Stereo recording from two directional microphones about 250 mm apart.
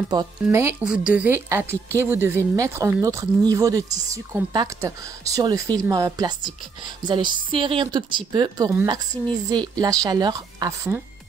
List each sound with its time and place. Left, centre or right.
0.1 s speech: centre